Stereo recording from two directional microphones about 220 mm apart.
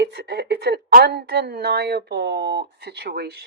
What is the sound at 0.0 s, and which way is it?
A woman's voice, 50° right (ahead or behind).